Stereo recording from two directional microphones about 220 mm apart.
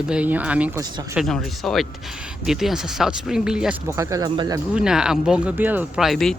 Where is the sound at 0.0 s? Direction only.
5° right (ahead or behind).